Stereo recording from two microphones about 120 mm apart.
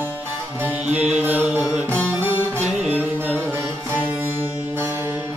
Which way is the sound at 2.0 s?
15° right (ahead or behind).